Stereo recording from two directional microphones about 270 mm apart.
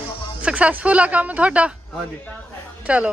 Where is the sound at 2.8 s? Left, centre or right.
Centre.